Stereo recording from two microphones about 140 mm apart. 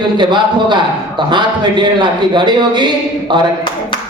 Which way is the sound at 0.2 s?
35° right (ahead or behind).